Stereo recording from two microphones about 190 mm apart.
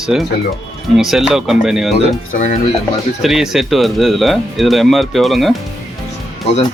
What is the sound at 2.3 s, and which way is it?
Speech, 40° left (ahead or behind).